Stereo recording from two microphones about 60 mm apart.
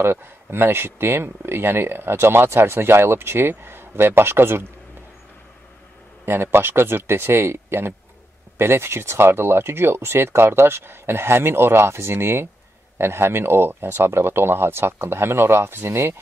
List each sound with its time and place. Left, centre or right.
0.0 s speech: right
6.2 s speech: right